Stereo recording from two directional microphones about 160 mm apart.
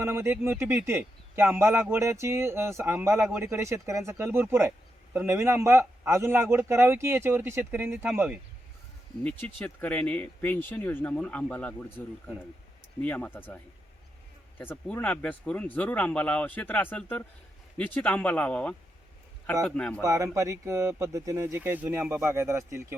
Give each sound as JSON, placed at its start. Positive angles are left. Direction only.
{"t": 0.0, "sound": "speech", "side_deg": -15}
{"t": 9.2, "sound": "speech", "side_deg": 10}
{"t": 14.6, "sound": "speech", "side_deg": 10}
{"t": 20.0, "sound": "speech", "side_deg": -20}